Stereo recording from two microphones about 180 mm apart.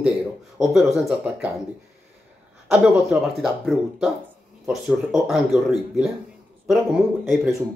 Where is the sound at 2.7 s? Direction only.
5° right (ahead or behind).